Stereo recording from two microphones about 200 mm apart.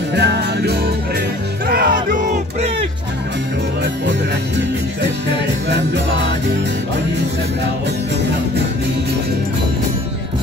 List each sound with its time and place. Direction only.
0.1 s music: 60° right (ahead or behind)